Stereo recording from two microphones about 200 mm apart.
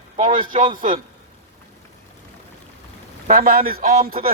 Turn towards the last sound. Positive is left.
turn(degrees=-45)  # may be behind; listen again after turning